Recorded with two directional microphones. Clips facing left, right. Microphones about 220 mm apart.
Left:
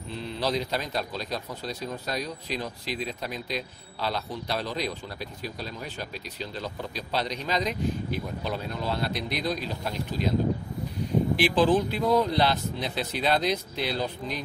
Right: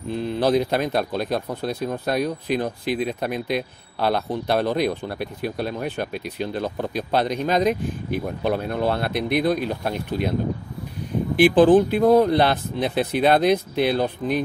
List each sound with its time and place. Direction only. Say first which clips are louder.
0.1 s a man's voice: right 9 dB; 50° right (ahead or behind)
11.3 s a man's voice: right 10 dB; 50° right (ahead or behind)